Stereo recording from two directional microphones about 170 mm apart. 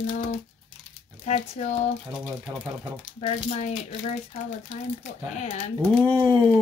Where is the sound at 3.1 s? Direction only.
40° left (ahead or behind).